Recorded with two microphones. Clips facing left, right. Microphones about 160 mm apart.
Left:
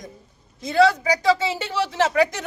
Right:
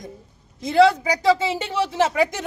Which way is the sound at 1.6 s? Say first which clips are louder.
Right 1 dB; 15° right (ahead or behind).